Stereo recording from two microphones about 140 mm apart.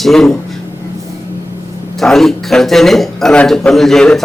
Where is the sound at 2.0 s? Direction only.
Centre (ahead or behind).